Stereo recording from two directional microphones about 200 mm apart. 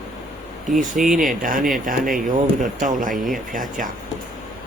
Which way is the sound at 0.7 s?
40° right (ahead or behind).